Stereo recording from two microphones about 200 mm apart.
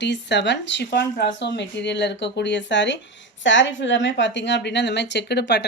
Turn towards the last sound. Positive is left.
turn(degrees=55)  # may be behind; listen again after turning